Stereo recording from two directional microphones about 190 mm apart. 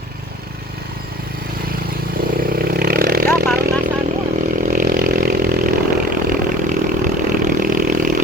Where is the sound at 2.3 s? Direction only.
50° right (ahead or behind).